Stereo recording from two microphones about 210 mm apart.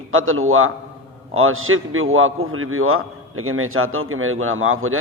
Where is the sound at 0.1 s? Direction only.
75° right (ahead or behind).